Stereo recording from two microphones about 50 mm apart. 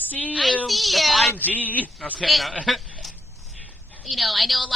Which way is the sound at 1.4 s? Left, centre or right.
Left.